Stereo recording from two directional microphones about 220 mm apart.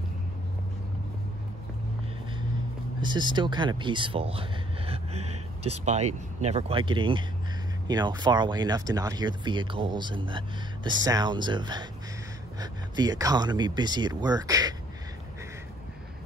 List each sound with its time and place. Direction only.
3.0 s speech: 20° right (ahead or behind)